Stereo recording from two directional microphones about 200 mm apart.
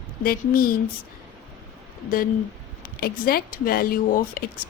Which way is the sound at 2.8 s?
45° left (ahead or behind).